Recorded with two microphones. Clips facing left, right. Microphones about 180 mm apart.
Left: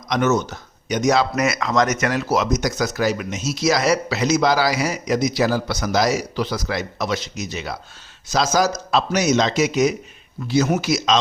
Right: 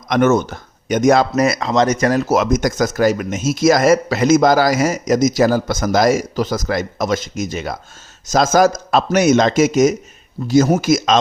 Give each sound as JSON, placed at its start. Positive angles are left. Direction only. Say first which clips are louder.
{"t": 0.1, "sound": "speech", "louder": "right 5 dB", "side_deg": -55}
{"t": 1.4, "sound": "speech", "louder": "right 4 dB", "side_deg": -35}